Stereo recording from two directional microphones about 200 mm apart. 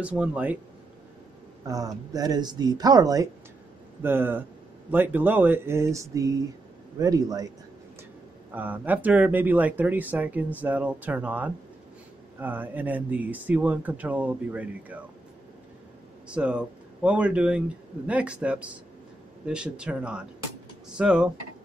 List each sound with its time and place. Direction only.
0.0 s speech: 5° right (ahead or behind)
1.7 s speech: 15° right (ahead or behind)
8.5 s speech: 10° right (ahead or behind)
16.3 s a man's voice: 5° right (ahead or behind)